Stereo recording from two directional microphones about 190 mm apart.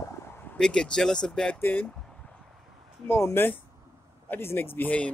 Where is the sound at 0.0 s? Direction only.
10° left (ahead or behind).